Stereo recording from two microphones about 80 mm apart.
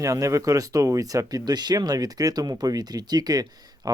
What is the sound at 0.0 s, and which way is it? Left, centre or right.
Speech, right.